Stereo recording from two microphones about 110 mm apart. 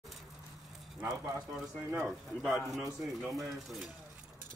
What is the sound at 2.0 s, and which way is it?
Speech, centre (ahead or behind).